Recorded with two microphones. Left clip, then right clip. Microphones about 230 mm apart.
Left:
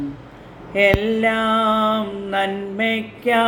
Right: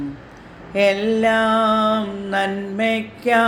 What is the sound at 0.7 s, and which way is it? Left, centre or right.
Mantra, right.